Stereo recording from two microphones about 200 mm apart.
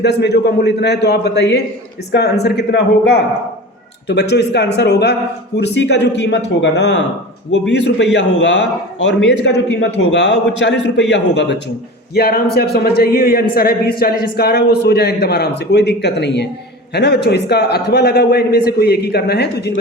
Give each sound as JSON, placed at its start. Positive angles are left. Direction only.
{"t": 0.0, "sound": "a man's voice", "side_deg": 55}